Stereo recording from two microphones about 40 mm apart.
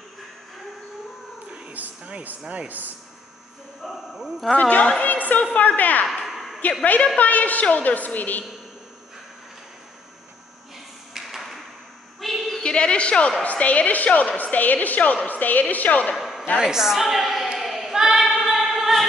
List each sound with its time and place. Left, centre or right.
1.8 s a sound: right
2.5 s speech: right
3.8 s speech: centre
4.6 s a woman's voice: left
6.0 s a sound: centre
6.8 s a woman's voice: left
11.2 s tap: centre
12.2 s a sound: centre
12.6 s a woman's voice: left
16.2 s a sound: centre
16.6 s a woman's voice: centre
17.6 s choir: centre
17.9 s choir: centre